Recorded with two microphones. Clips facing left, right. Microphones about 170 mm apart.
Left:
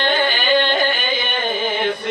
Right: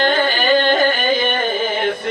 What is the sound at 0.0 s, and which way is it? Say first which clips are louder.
Music: right 3 dB; 45° right (ahead or behind).